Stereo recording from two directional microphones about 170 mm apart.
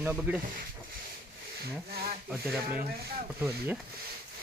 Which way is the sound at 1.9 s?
65° right (ahead or behind).